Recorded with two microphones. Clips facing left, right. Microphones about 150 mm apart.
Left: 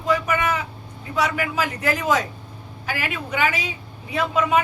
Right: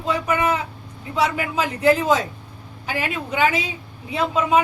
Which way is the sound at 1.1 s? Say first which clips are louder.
Right 1 dB; 25° right (ahead or behind).